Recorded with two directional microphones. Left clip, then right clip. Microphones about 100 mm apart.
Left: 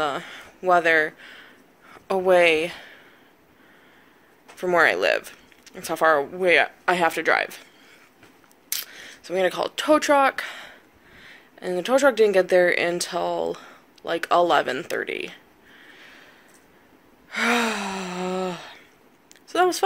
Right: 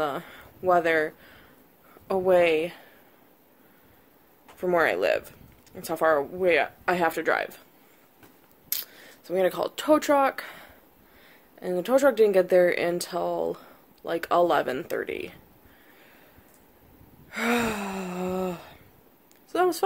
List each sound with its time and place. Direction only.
0.0 s speech: 25° right (ahead or behind)
2.0 s speech: 10° right (ahead or behind)
4.6 s speech: 20° right (ahead or behind)
8.6 s speech: 25° right (ahead or behind)
17.3 s gasp: 25° right (ahead or behind)
19.5 s speech: 25° right (ahead or behind)